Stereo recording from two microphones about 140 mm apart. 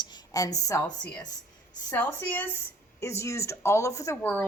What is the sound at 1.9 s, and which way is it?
A woman's voice, 15° left (ahead or behind).